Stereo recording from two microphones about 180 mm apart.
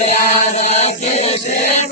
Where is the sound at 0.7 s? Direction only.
35° left (ahead or behind).